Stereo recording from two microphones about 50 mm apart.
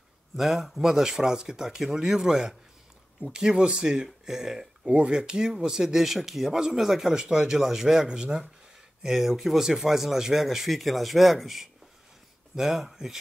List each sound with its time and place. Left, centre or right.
0.4 s speech: centre